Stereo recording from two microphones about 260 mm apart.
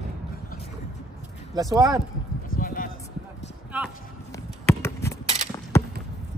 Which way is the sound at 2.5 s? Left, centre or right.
Left.